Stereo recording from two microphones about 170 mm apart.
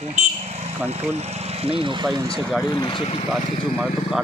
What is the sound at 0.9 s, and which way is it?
Speech, 40° right (ahead or behind).